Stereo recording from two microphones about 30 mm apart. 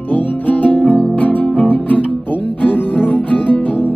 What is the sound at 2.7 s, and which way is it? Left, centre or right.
Music, left.